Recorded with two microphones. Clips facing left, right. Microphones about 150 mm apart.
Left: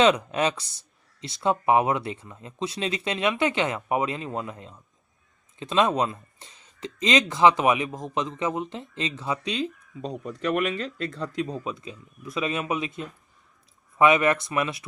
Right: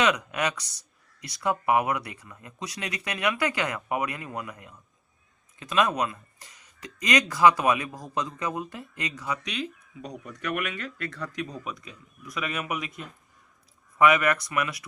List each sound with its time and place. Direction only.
0.0 s speech: 30° left (ahead or behind)